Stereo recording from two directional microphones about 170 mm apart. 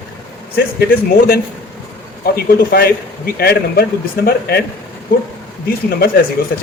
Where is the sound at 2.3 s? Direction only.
60° left (ahead or behind).